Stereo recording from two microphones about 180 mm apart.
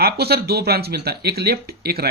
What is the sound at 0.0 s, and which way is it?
Speech, 60° right (ahead or behind).